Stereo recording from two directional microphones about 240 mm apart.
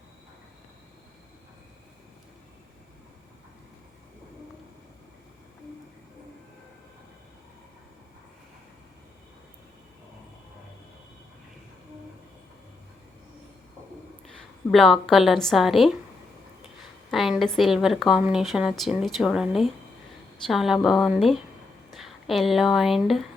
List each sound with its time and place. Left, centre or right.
14.7 s speech: centre